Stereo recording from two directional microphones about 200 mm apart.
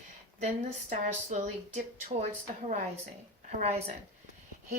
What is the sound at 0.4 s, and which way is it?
Speech, 40° right (ahead or behind).